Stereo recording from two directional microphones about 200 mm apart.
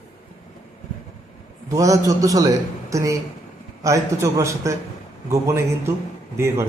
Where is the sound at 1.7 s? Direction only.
15° right (ahead or behind).